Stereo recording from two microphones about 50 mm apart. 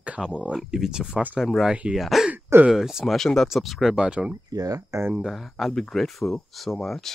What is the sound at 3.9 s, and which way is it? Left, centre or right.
Speech, right.